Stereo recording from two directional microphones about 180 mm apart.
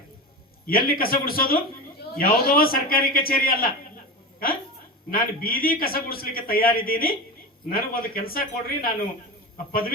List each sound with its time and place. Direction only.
0.7 s a man's voice: 55° left (ahead or behind)
5.1 s a man's voice: 55° left (ahead or behind)